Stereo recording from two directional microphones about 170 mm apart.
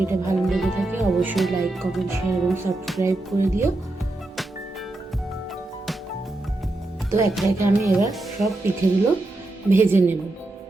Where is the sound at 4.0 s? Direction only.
Centre (ahead or behind).